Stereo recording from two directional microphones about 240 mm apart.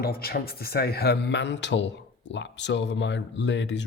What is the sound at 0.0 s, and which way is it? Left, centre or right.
Speech, left.